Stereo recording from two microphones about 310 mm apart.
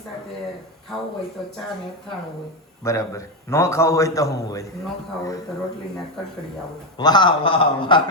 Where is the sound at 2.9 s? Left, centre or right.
Centre.